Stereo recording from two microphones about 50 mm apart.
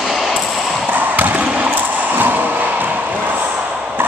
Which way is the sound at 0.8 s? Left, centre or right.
Right.